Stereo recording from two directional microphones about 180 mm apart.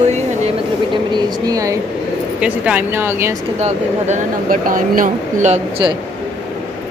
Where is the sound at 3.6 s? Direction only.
45° right (ahead or behind).